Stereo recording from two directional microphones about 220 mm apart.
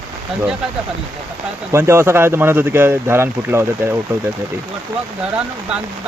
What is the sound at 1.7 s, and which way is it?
Speech, 10° right (ahead or behind).